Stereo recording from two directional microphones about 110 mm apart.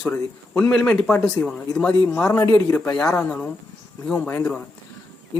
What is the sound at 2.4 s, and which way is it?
Speech, 25° left (ahead or behind).